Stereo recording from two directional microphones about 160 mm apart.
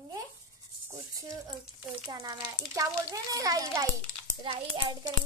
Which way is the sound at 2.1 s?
20° right (ahead or behind).